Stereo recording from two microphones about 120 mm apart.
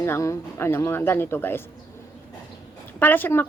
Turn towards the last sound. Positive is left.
turn(degrees=15)  # may be behind; listen again after turning